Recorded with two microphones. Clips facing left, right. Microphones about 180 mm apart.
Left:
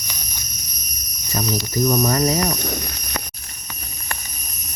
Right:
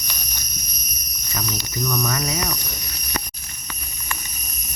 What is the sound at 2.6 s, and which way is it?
Speech, 65° left (ahead or behind).